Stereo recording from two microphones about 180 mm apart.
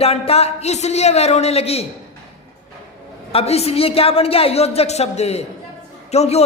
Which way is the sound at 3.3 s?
35° left (ahead or behind).